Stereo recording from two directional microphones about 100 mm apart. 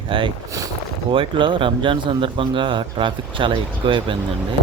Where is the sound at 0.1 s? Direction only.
60° right (ahead or behind).